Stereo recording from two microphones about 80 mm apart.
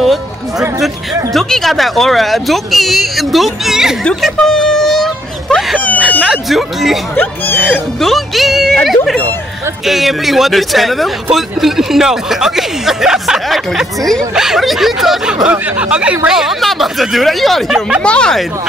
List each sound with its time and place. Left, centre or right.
0.0 s a man's voice: centre
4.2 s a sound: centre
5.9 s a sound: centre
6.2 s a man's voice: centre
8.0 s a man's voice: centre
18.0 s speech: centre